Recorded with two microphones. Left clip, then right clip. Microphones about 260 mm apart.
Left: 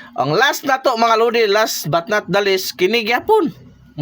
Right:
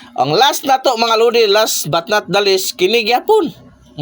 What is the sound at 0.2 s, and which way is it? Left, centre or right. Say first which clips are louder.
A man's voice: right 3 dB; centre.